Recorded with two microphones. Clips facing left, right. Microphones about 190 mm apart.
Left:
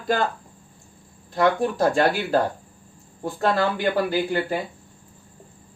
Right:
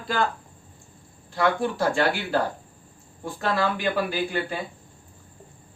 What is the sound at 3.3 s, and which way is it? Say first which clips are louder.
Speech: left 3 dB; 40° left (ahead or behind).